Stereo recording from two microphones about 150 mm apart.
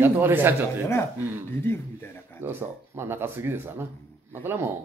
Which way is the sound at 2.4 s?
15° right (ahead or behind).